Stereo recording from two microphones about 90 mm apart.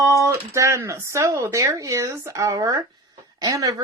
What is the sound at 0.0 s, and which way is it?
Speech, 35° right (ahead or behind).